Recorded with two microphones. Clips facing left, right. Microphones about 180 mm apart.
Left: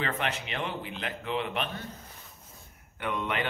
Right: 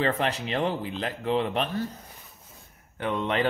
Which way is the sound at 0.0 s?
35° right (ahead or behind).